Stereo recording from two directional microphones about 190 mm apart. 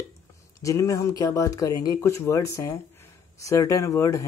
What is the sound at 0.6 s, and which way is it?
Speech, 15° left (ahead or behind).